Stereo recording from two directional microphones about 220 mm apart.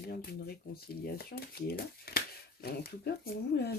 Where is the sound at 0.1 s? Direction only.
45° left (ahead or behind).